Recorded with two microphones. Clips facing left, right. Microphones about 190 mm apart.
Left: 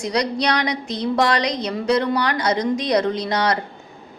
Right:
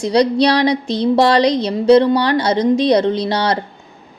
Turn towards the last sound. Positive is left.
turn(degrees=-30)  # may be behind; listen again after turning